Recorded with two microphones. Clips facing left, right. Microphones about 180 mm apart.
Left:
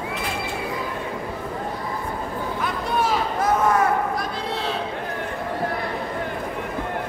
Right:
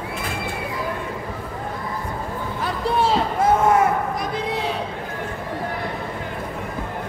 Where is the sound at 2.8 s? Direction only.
30° right (ahead or behind).